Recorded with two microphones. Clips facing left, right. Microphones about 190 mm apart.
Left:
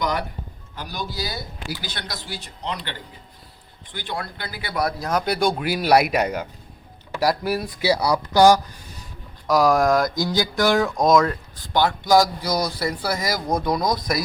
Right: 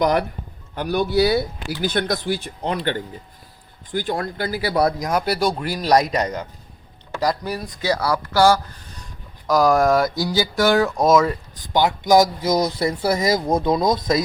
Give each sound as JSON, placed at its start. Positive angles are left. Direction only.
{"t": 0.8, "sound": "speech", "side_deg": -60}
{"t": 4.9, "sound": "speech", "side_deg": -10}
{"t": 9.5, "sound": "speech", "side_deg": 0}
{"t": 11.5, "sound": "speech", "side_deg": -15}